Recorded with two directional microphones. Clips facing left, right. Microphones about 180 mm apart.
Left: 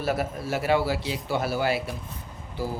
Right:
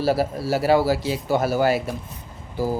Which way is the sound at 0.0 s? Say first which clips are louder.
Right 6 dB; 30° right (ahead or behind).